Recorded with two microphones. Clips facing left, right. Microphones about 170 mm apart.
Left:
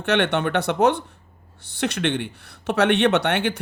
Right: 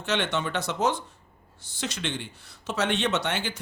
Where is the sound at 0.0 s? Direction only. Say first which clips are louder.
Left 7 dB; 60° left (ahead or behind).